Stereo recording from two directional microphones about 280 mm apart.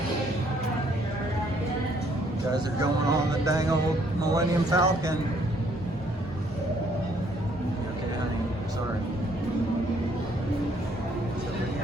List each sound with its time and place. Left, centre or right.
2.5 s speech: centre